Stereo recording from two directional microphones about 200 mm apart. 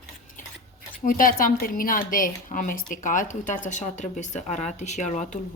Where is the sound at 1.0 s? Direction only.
45° left (ahead or behind).